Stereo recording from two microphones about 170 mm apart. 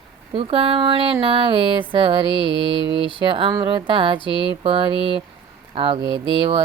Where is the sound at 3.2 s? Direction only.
30° right (ahead or behind).